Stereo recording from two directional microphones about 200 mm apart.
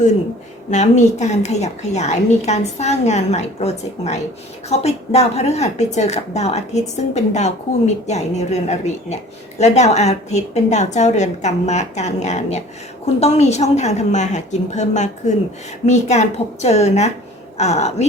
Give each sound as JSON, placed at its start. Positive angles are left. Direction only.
{"t": 0.7, "sound": "a woman's voice", "side_deg": 35}